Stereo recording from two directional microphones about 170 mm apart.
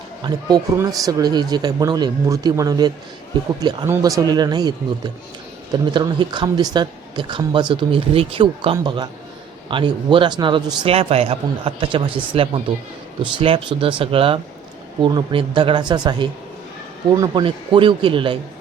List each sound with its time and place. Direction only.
0.2 s speech: 25° right (ahead or behind)
5.7 s a man's voice: 25° right (ahead or behind)